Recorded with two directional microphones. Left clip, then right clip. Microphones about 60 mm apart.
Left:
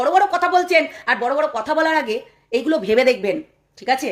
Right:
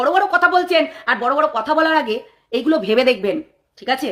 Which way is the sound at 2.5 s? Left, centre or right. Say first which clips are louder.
Right 1 dB; centre.